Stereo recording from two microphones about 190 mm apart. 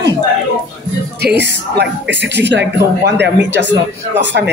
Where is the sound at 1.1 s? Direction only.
60° right (ahead or behind).